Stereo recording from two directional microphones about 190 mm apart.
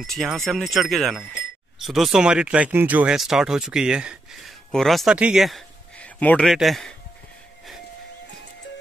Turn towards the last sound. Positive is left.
turn(degrees=0)  # may be behind; listen again after turning